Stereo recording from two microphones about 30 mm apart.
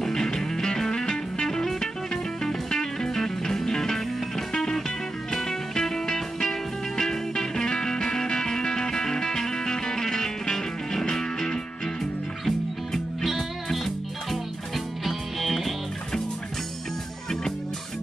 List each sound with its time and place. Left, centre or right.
0.0 s music: centre
2.7 s music: centre